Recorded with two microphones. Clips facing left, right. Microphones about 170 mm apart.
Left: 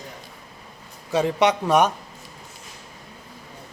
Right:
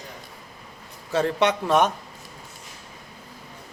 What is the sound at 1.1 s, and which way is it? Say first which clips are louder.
Speech: left 2 dB; 15° left (ahead or behind).